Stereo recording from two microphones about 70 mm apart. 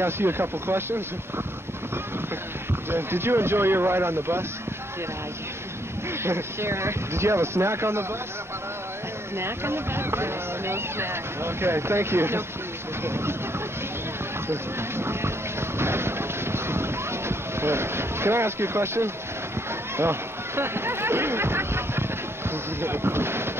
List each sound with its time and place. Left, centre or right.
0.0 s speech: right
2.9 s speech: right
6.2 s speech: right
9.4 s speech: right
14.5 s speech: right
15.8 s a sound: right
20.0 s speech: right